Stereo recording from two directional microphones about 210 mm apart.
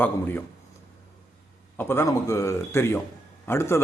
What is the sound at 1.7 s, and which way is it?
Speech, 10° left (ahead or behind).